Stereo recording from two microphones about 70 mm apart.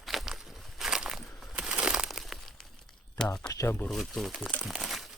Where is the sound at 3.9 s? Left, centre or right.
Centre.